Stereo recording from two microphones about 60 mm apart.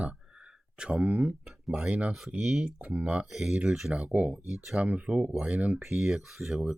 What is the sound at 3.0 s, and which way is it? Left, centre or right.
Speech, right.